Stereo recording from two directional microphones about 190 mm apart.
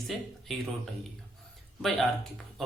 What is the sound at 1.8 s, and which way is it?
Speech, centre (ahead or behind).